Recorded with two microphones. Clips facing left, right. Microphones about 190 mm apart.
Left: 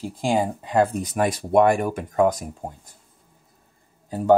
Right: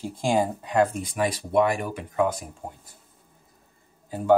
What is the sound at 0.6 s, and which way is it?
Speech, 25° left (ahead or behind).